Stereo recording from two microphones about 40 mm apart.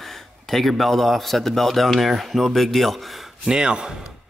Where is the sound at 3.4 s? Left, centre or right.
Centre.